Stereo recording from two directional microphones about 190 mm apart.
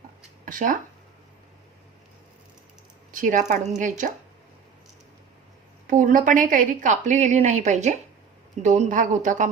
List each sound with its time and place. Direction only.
0.4 s speech: 45° right (ahead or behind)
3.1 s a woman's voice: 45° right (ahead or behind)
5.9 s a woman's voice: 45° right (ahead or behind)